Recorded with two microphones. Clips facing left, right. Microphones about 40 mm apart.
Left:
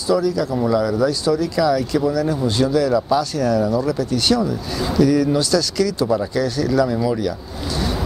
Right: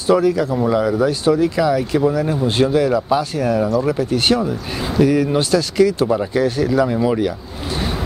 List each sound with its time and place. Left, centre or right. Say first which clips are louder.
0.1 s speech: right 3 dB; right